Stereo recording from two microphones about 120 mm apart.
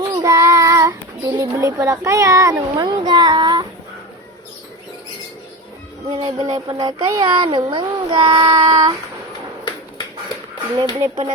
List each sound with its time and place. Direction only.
0.1 s speech: 30° right (ahead or behind)
6.1 s speech: 35° right (ahead or behind)
10.8 s speech: 45° right (ahead or behind)